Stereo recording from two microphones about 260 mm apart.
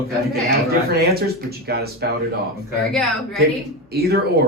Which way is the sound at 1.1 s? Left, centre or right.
Right.